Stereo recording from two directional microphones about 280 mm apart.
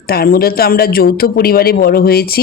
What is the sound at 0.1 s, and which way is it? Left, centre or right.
Speech, left.